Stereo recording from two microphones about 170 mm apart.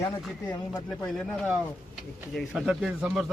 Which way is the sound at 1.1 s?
5° left (ahead or behind).